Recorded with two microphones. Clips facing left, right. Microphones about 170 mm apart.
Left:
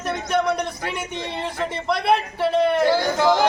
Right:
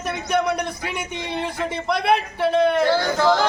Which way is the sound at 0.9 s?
Centre (ahead or behind).